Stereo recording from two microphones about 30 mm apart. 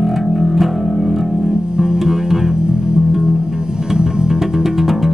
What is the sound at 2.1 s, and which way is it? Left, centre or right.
Music, centre.